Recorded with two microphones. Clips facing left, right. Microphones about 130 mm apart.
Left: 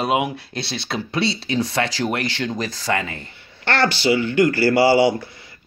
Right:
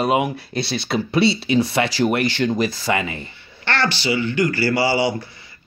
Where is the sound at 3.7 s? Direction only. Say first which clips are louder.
Left 3 dB; 50° left (ahead or behind).